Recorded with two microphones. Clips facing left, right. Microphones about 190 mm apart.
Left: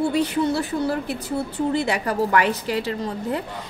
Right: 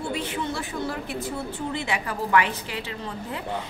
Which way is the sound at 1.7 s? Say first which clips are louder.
Left 7 dB; 40° left (ahead or behind).